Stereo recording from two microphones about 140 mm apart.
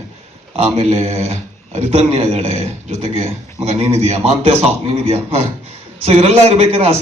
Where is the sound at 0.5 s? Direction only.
50° right (ahead or behind).